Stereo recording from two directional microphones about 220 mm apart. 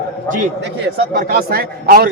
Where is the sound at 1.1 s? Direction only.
40° right (ahead or behind).